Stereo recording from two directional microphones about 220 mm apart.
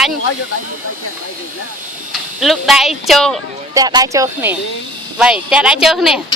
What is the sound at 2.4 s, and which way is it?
Speech, centre (ahead or behind).